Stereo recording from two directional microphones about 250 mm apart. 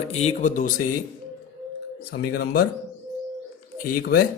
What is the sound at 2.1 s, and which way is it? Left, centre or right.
Speech, left.